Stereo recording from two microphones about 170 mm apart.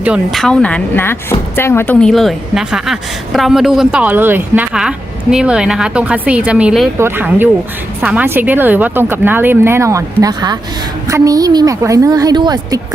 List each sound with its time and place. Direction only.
0.0 s a woman's voice: 5° right (ahead or behind); by 12.8 s 25° right (ahead or behind)